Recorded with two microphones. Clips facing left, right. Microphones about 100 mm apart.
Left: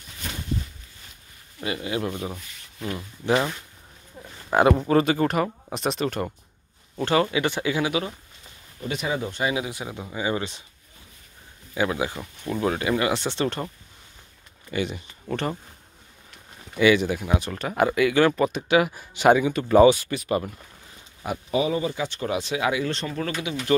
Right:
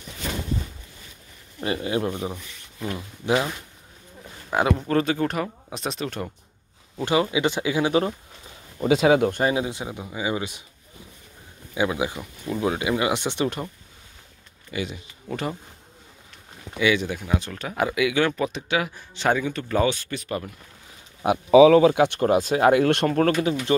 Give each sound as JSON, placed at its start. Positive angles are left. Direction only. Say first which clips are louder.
{"t": 1.6, "sound": "speech", "louder": "right 3 dB", "side_deg": -30}
{"t": 3.3, "sound": "speech", "louder": "even", "side_deg": -5}
{"t": 7.0, "sound": "speech", "louder": "even", "side_deg": -15}
{"t": 8.8, "sound": "speech", "louder": "right 10 dB", "side_deg": -90}
{"t": 9.5, "sound": "speech", "louder": "right 3 dB", "side_deg": -25}
{"t": 10.0, "sound": "speech", "louder": "left 1 dB", "side_deg": -10}
{"t": 11.7, "sound": "speech", "louder": "right 1 dB", "side_deg": -15}
{"t": 14.7, "sound": "speech", "louder": "left 3 dB", "side_deg": 0}
{"t": 16.7, "sound": "speech", "louder": "left 3 dB", "side_deg": 0}
{"t": 21.2, "sound": "speech", "louder": "right 11 dB", "side_deg": -75}